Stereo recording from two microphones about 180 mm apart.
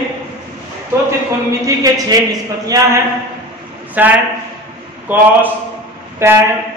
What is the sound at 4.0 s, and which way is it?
Speech, 10° right (ahead or behind).